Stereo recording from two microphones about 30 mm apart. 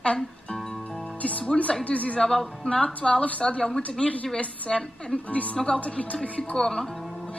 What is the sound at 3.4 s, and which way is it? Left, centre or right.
Speech, left.